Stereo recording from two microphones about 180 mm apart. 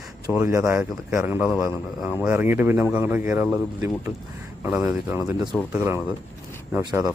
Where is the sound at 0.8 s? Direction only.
5° right (ahead or behind).